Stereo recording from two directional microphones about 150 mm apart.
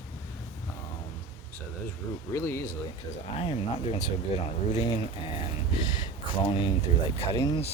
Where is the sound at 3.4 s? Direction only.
40° left (ahead or behind).